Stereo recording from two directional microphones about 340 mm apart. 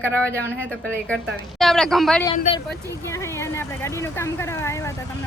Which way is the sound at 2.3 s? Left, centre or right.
Centre.